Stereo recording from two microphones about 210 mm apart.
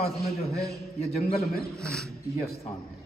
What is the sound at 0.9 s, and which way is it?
Speech, 30° left (ahead or behind).